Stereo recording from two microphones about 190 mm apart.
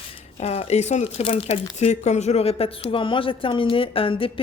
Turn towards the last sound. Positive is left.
turn(degrees=30)  # may be behind; listen again after turning